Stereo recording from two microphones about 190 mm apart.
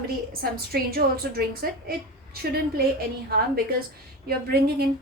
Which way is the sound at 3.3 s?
50° right (ahead or behind).